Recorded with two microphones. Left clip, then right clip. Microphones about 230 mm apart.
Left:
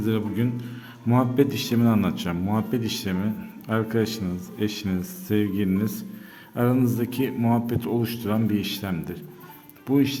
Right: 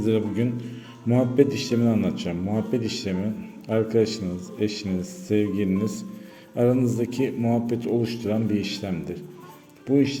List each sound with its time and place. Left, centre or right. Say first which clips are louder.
0.0 s a man's voice: right 3 dB; centre